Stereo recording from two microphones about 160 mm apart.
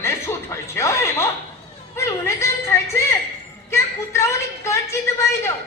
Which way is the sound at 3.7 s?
15° left (ahead or behind).